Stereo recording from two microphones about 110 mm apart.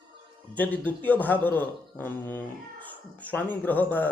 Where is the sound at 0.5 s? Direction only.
15° left (ahead or behind).